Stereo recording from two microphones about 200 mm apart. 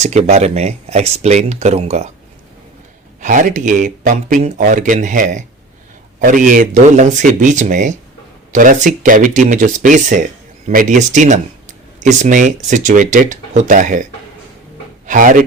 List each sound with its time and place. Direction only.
0.0 s speech: 35° right (ahead or behind)
3.2 s speech: 40° right (ahead or behind)